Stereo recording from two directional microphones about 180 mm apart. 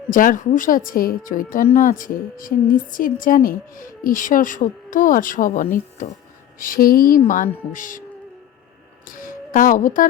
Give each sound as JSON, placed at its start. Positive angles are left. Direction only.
{"t": 0.1, "sound": "a woman's voice", "side_deg": 50}
{"t": 9.0, "sound": "speech", "side_deg": 50}